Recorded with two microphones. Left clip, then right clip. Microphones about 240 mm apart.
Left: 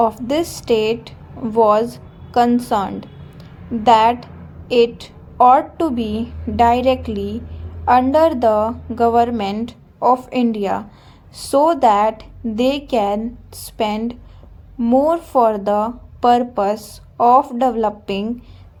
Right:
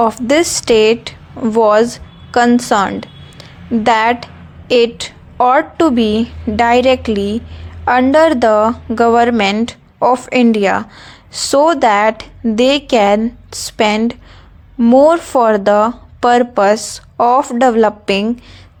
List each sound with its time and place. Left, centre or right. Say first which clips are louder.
0.0 s a woman's voice: right 5 dB; right